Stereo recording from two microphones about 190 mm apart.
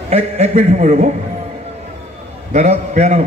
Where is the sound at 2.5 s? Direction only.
35° right (ahead or behind).